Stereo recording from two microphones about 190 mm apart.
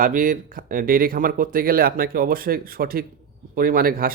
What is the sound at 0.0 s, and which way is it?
A man's voice, 45° right (ahead or behind).